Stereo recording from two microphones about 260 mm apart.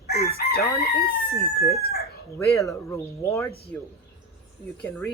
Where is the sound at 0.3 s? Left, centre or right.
Left.